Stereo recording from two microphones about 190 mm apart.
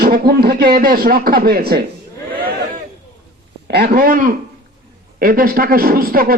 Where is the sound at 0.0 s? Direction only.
55° right (ahead or behind).